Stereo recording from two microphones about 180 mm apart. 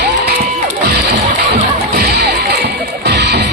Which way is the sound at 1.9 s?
65° right (ahead or behind).